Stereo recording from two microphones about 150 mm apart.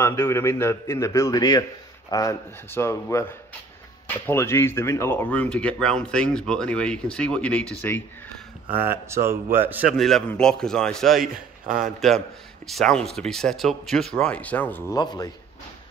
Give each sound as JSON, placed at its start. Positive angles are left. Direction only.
{"t": 0.0, "sound": "a man's voice", "side_deg": 15}
{"t": 8.6, "sound": "a man's voice", "side_deg": -15}
{"t": 9.9, "sound": "speech", "side_deg": 0}
{"t": 11.6, "sound": "a man's voice", "side_deg": -60}
{"t": 12.6, "sound": "speech", "side_deg": 5}
{"t": 14.9, "sound": "a man's voice", "side_deg": 25}